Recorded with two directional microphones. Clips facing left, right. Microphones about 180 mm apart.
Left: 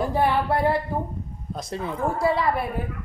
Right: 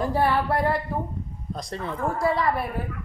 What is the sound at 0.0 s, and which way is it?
Female singing, 20° left (ahead or behind).